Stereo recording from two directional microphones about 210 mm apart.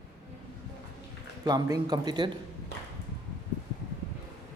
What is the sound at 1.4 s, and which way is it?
Speech, 20° right (ahead or behind).